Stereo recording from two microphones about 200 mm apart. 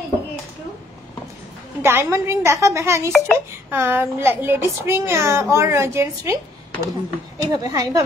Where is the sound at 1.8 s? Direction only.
10° right (ahead or behind).